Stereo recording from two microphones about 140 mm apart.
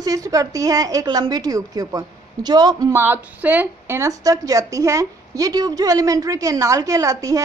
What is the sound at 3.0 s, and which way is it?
A woman's voice, 15° right (ahead or behind).